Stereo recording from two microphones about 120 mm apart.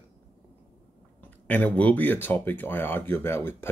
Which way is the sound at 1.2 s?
15° left (ahead or behind).